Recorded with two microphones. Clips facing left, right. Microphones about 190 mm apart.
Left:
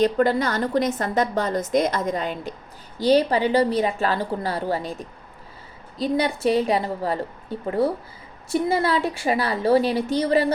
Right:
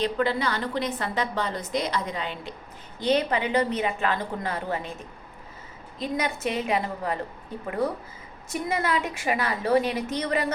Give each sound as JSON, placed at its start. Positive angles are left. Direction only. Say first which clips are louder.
{"t": 0.0, "sound": "a woman's voice", "louder": "left 6 dB", "side_deg": 45}
{"t": 6.0, "sound": "a woman's voice", "louder": "left 6 dB", "side_deg": 35}